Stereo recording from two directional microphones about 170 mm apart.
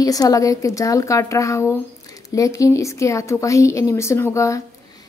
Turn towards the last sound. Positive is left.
turn(degrees=15)  # may be behind; listen again after turning